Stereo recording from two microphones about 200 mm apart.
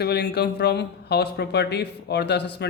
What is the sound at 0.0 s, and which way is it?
Speech, 55° left (ahead or behind).